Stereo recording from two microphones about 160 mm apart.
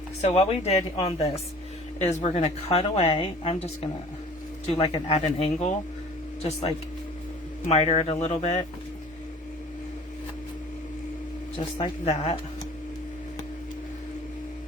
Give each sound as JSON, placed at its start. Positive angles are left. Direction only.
{"t": 0.2, "sound": "a woman's voice", "side_deg": 45}
{"t": 7.7, "sound": "a woman's voice", "side_deg": 40}
{"t": 11.8, "sound": "a woman's voice", "side_deg": 40}